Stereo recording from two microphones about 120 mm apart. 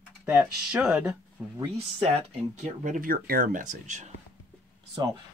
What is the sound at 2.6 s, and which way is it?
Speech, 90° right.